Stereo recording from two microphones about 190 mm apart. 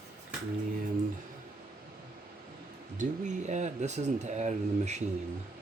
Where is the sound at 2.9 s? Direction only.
40° right (ahead or behind).